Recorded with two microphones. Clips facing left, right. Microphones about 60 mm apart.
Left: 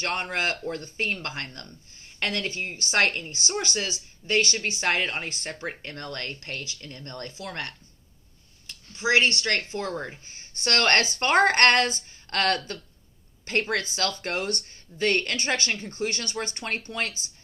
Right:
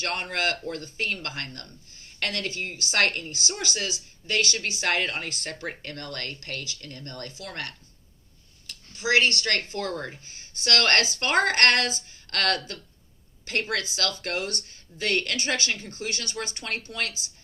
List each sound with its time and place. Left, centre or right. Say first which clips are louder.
0.0 s speech: even; left